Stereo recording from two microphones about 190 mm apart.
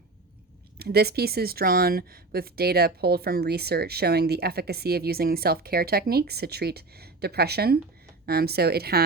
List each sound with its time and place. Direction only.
0.8 s speech: 55° right (ahead or behind)